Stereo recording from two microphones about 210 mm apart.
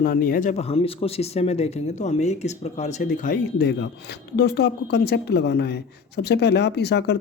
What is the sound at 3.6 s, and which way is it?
Speech, 55° left (ahead or behind).